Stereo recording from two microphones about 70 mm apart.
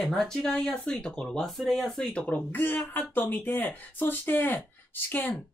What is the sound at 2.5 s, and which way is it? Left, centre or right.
Speech, left.